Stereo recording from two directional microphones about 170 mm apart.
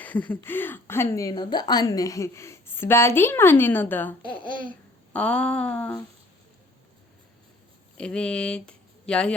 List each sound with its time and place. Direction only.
0.0 s a woman's voice: 10° left (ahead or behind)
5.1 s a woman's voice: 5° left (ahead or behind)
7.9 s speech: 5° left (ahead or behind)